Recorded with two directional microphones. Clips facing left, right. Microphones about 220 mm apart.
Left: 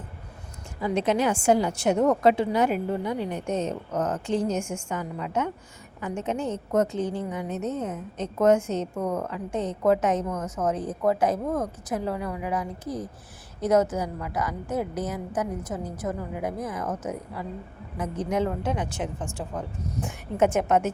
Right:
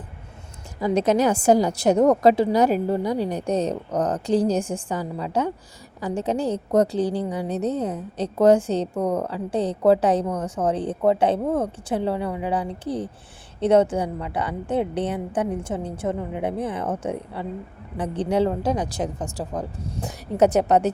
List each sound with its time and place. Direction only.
0.8 s a woman's voice: 40° right (ahead or behind)